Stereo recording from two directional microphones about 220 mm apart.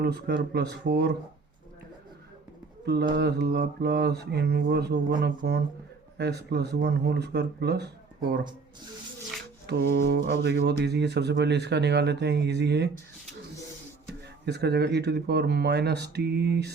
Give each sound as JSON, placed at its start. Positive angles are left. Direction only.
{"t": 0.0, "sound": "speech", "side_deg": -50}
{"t": 2.8, "sound": "speech", "side_deg": -50}
{"t": 9.6, "sound": "speech", "side_deg": -45}
{"t": 14.4, "sound": "speech", "side_deg": -50}